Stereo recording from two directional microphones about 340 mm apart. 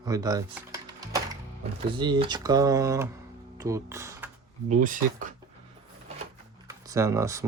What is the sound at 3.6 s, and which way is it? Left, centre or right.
Music, centre.